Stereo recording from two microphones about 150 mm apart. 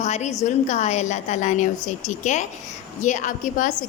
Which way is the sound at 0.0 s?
50° left (ahead or behind).